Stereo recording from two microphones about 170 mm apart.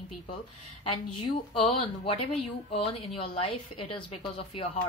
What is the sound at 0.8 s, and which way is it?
Speech, 30° left (ahead or behind).